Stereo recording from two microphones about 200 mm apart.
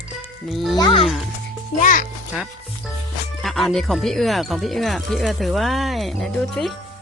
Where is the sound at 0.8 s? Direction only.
25° left (ahead or behind).